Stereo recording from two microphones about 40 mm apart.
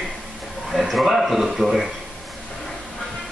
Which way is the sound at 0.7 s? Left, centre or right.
Centre.